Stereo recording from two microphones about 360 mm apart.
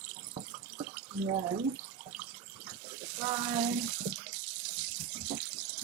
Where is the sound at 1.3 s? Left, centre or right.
Centre.